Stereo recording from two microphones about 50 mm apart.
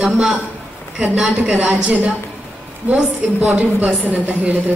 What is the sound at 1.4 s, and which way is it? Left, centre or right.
A woman's voice, right.